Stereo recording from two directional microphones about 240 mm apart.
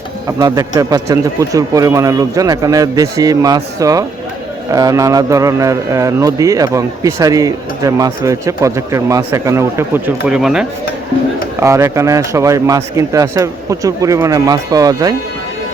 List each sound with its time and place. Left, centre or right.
0.3 s a man's voice: centre